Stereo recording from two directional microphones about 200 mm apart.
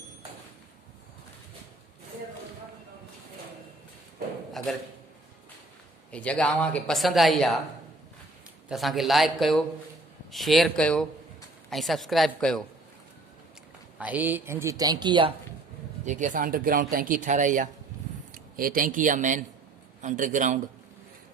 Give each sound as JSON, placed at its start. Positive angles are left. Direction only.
{"t": 4.5, "sound": "a sound", "side_deg": 0}
{"t": 6.1, "sound": "speech", "side_deg": 5}
{"t": 8.7, "sound": "speech", "side_deg": 0}
{"t": 14.0, "sound": "speech", "side_deg": -10}
{"t": 16.0, "sound": "a man's voice", "side_deg": -40}